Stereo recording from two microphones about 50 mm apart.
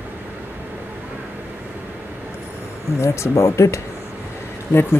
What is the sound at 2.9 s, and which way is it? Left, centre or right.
Speech, left.